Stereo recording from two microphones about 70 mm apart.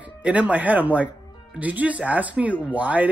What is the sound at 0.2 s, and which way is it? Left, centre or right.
Speech, centre.